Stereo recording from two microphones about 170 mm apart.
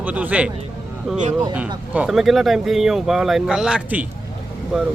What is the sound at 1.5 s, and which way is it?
Speech, 10° right (ahead or behind).